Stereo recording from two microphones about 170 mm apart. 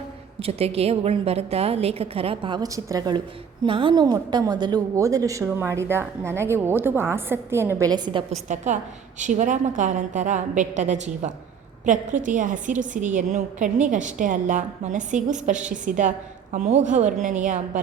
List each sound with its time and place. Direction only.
0.3 s a woman's voice: 35° right (ahead or behind); by 3.2 s 20° right (ahead or behind)
3.7 s a woman's voice: 30° right (ahead or behind)
8.3 s a woman's voice: 45° right (ahead or behind)